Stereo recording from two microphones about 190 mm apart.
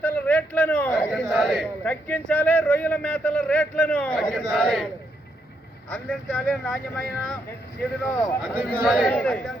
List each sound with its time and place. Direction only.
0.0 s a man's voice: 10° left (ahead or behind)
5.9 s speech: 5° left (ahead or behind)
8.4 s speech: centre (ahead or behind)